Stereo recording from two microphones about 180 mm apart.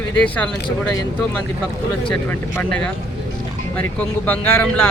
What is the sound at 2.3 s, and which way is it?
Speech, 10° left (ahead or behind).